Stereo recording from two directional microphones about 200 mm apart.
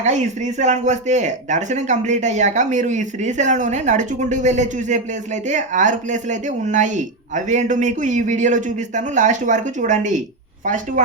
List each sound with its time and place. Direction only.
0.6 s speech: 35° right (ahead or behind)